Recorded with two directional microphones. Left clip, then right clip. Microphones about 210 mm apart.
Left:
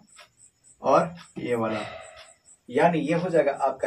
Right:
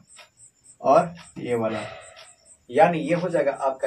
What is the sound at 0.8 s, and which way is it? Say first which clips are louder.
Speech: right 3 dB; 10° right (ahead or behind).